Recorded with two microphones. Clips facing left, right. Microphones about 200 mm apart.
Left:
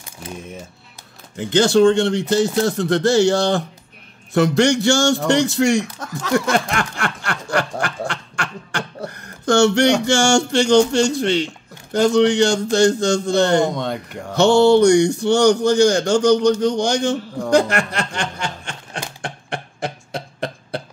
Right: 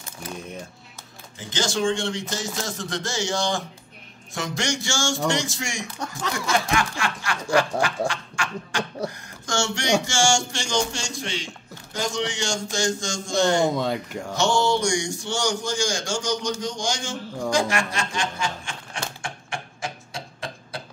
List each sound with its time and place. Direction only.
1.4 s speech: 60° left (ahead or behind)
5.9 s speech: centre (ahead or behind)
6.5 s snicker: 60° left (ahead or behind)
9.1 s speech: 60° left (ahead or behind)
13.7 s speech: centre (ahead or behind)
14.3 s speech: 60° left (ahead or behind)
19.2 s a sound: 60° left (ahead or behind)